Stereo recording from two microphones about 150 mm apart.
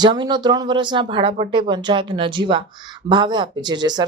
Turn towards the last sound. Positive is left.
turn(degrees=-30)  # may be behind; listen again after turning